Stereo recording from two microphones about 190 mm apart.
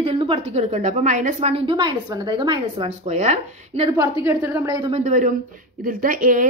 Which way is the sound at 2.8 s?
35° right (ahead or behind).